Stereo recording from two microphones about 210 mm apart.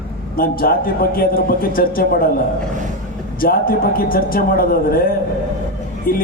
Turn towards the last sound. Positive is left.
turn(degrees=45)  # may be behind; listen again after turning